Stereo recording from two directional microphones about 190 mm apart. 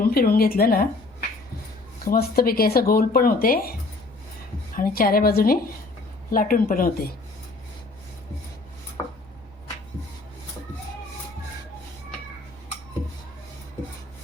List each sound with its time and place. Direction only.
0.0 s speech: 50° left (ahead or behind)
2.0 s speech: 55° left (ahead or behind)
4.8 s speech: 50° left (ahead or behind)